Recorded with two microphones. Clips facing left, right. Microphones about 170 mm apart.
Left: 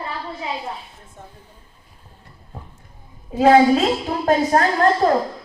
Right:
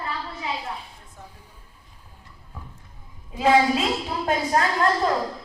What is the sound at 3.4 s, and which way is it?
A woman's voice, 40° left (ahead or behind).